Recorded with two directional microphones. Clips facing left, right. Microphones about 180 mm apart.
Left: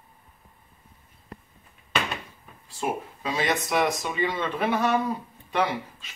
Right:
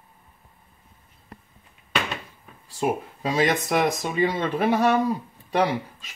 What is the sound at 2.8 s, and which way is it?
Speech, 40° right (ahead or behind).